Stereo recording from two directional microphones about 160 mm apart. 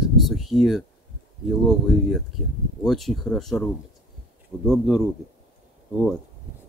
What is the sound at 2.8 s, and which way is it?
Speech, centre (ahead or behind).